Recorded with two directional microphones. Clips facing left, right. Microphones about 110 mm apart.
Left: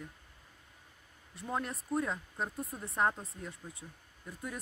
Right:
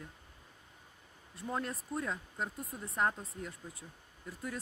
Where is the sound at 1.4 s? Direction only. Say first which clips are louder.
Left 1 dB; 10° left (ahead or behind).